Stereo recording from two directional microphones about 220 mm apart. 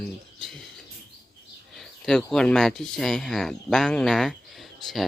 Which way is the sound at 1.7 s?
5° left (ahead or behind).